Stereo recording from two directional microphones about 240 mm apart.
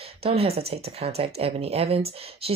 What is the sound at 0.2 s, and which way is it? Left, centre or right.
A woman's voice, right.